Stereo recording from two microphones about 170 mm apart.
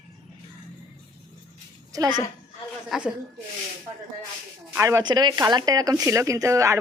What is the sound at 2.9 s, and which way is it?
Speech, 5° right (ahead or behind).